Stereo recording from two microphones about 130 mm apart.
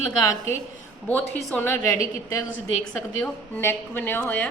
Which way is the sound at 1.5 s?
15° left (ahead or behind).